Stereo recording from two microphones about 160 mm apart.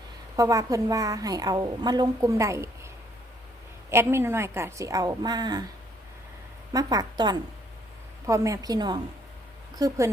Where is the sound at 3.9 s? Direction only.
15° right (ahead or behind).